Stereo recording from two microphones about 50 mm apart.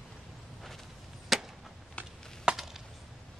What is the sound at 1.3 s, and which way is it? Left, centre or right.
Chop, centre.